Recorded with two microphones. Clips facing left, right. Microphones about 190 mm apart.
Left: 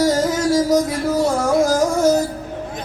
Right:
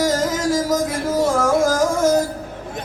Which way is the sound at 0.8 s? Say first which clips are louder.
Left 1 dB; 50° right (ahead or behind).